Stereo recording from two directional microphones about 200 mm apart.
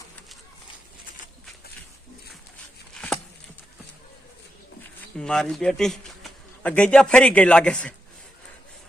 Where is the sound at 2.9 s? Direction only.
Centre (ahead or behind).